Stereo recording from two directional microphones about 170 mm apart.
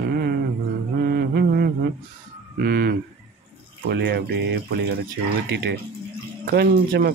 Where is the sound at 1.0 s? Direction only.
65° right (ahead or behind).